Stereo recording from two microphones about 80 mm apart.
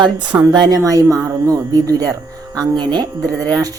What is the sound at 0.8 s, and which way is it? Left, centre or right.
Speech, right.